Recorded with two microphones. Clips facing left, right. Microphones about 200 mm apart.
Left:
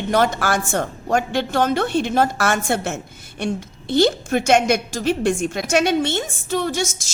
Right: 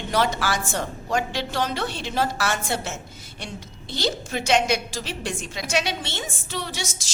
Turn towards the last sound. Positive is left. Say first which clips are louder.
# left 10 dB
turn(degrees=50)  # may be behind; listen again after turning